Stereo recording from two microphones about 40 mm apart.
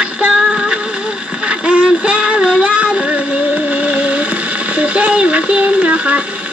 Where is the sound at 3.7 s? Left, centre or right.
Right.